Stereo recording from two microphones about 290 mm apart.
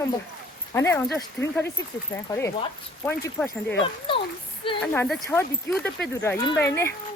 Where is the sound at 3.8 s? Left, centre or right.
Centre.